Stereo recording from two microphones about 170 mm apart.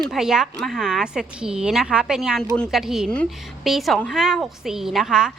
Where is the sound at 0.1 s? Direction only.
5° right (ahead or behind).